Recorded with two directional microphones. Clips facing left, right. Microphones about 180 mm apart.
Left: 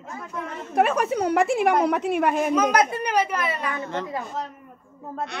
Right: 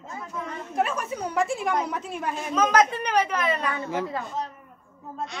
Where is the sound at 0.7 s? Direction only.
70° left (ahead or behind).